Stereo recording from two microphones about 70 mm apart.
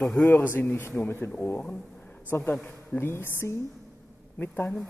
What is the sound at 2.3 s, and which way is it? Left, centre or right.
A woman's voice, left.